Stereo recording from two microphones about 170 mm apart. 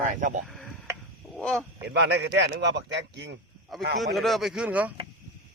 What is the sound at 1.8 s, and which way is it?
A man's voice, 85° right.